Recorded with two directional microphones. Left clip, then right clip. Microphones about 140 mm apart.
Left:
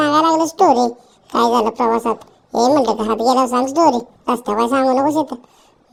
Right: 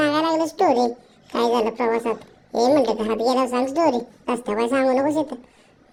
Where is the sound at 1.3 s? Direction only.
45° left (ahead or behind).